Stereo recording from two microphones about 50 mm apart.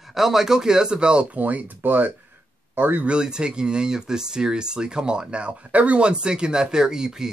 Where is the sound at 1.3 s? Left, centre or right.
Right.